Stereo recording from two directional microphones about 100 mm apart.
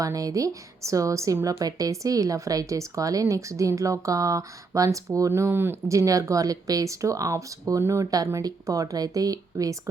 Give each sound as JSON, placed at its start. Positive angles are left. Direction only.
{"t": 0.0, "sound": "a woman's voice", "side_deg": -35}